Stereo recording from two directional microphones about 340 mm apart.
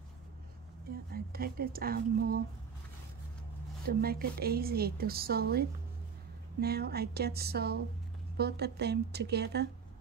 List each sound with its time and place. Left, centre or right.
1.1 s a woman's voice: right
3.8 s a woman's voice: right